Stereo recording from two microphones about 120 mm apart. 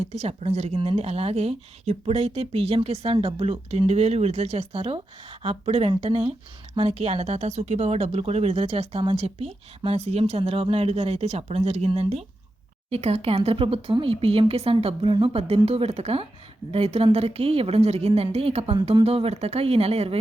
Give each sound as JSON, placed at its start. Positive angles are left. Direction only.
{"t": 0.0, "sound": "speech", "side_deg": -60}